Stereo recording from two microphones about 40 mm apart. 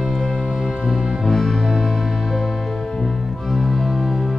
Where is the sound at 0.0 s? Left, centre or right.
Centre.